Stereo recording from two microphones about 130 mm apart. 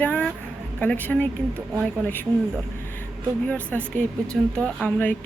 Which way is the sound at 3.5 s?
10° left (ahead or behind).